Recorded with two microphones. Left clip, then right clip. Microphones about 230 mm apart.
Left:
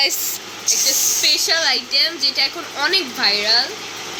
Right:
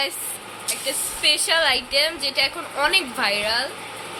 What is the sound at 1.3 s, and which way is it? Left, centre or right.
A woman's voice, centre.